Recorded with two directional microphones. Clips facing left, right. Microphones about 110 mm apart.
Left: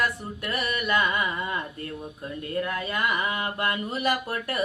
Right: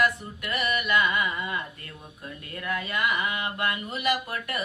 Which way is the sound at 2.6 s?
30° left (ahead or behind).